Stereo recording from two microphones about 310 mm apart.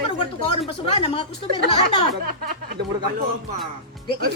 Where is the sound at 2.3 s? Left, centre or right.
Right.